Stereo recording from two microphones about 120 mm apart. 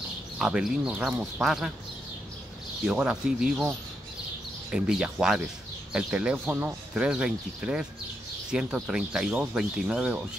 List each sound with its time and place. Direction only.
0.4 s speech: 5° right (ahead or behind)
2.8 s speech: 5° right (ahead or behind)